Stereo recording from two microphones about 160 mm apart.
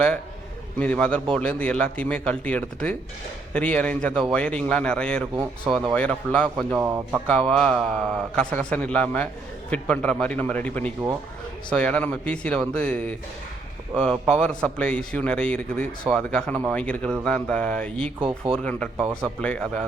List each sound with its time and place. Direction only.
0.8 s a man's voice: 5° left (ahead or behind)
5.3 s speech: 30° right (ahead or behind)
5.7 s a man's voice: 5° left (ahead or behind)
6.7 s speech: 10° right (ahead or behind)
7.3 s a man's voice: 5° left (ahead or behind)
18.2 s speech: 35° right (ahead or behind)
18.5 s a man's voice: 5° left (ahead or behind)